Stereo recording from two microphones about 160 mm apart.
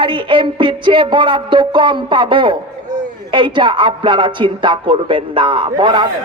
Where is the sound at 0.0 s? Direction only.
30° right (ahead or behind).